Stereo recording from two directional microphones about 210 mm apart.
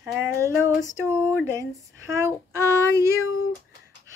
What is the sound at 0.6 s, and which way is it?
Female singing, 15° left (ahead or behind).